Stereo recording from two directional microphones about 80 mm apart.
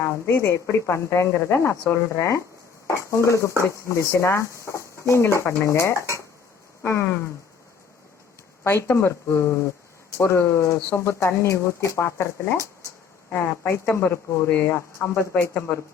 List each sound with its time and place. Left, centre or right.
0.0 s speech: left
8.6 s speech: left